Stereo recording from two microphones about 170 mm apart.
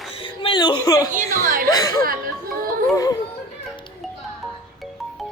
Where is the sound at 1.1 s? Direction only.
50° right (ahead or behind).